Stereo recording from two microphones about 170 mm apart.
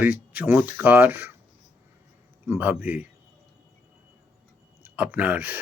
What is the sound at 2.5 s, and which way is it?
Speech, 10° right (ahead or behind).